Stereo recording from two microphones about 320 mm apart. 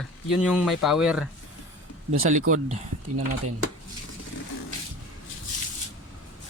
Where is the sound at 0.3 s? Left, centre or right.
Centre.